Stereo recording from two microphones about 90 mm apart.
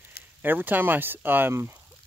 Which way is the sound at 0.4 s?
20° right (ahead or behind).